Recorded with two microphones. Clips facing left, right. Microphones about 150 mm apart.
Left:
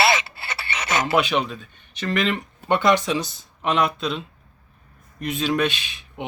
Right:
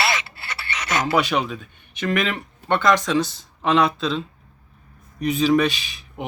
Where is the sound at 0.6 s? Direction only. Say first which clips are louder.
Even; 25° left (ahead or behind).